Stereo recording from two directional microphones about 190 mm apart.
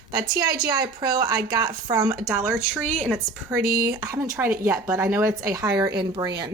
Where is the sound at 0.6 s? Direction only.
20° right (ahead or behind).